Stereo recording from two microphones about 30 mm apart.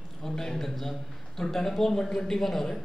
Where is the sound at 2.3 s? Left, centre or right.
Centre.